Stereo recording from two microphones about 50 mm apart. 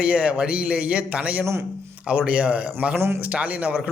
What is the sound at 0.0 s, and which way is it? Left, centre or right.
A man's voice, right.